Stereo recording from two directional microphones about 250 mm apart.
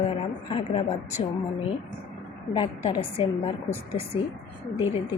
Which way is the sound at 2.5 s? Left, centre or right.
Centre.